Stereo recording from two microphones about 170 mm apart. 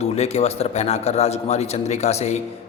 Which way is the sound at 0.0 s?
40° left (ahead or behind).